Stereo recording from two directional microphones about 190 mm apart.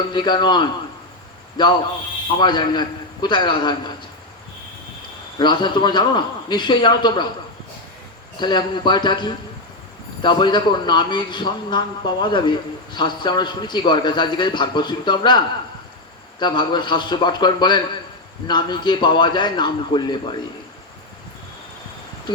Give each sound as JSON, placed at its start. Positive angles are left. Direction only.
{"t": 0.1, "sound": "a man's voice", "side_deg": 25}
{"t": 5.4, "sound": "a man's voice", "side_deg": 25}
{"t": 8.4, "sound": "a man's voice", "side_deg": 25}